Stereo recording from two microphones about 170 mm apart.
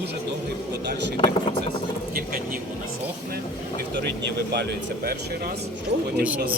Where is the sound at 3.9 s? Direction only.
85° right.